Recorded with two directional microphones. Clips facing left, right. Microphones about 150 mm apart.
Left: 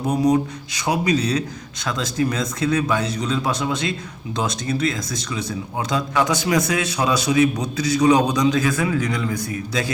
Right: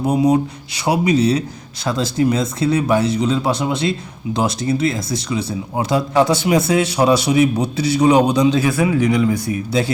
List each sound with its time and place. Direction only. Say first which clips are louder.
0.1 s speech: right 2 dB; 30° right (ahead or behind)
8.8 s speech: right 7 dB; 15° right (ahead or behind)